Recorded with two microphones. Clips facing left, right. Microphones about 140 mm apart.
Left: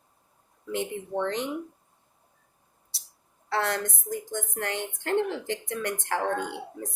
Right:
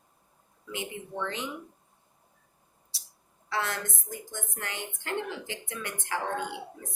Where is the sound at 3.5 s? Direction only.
60° left (ahead or behind).